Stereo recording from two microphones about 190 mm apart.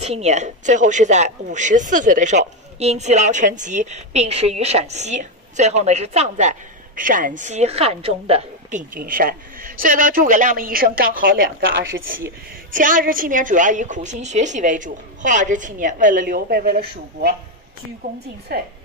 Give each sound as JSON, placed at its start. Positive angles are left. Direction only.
{"t": 0.0, "sound": "speech", "side_deg": -35}
{"t": 12.7, "sound": "a woman's voice", "side_deg": -45}